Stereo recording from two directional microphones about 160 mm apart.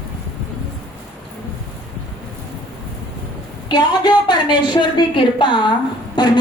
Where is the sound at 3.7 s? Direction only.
25° left (ahead or behind).